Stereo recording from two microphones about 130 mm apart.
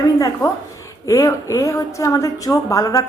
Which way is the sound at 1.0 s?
25° left (ahead or behind).